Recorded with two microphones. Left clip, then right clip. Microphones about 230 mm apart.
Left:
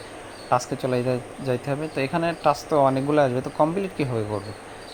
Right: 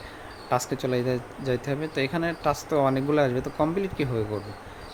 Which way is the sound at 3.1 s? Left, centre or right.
Centre.